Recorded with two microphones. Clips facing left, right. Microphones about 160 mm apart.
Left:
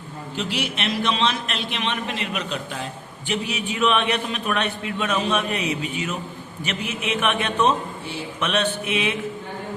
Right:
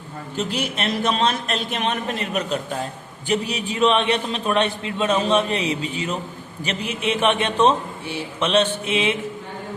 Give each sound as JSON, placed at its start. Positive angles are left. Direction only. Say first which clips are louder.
{"t": 0.3, "sound": "a man's voice", "louder": "right 2 dB", "side_deg": -40}
{"t": 8.4, "sound": "mantra", "louder": "right 4 dB", "side_deg": -30}